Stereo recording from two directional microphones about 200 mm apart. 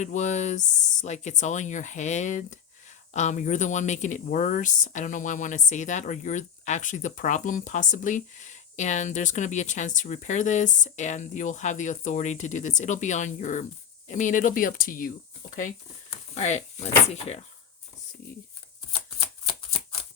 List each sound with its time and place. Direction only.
0.0 s speech: 35° left (ahead or behind)
18.9 s shuffling cards: 25° left (ahead or behind)